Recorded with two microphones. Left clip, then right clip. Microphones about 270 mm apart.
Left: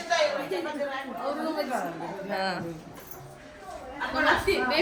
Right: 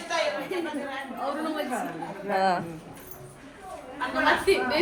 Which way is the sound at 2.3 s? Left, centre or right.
Centre.